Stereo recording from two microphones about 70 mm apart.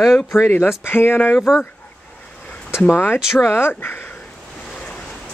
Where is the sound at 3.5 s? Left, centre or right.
Left.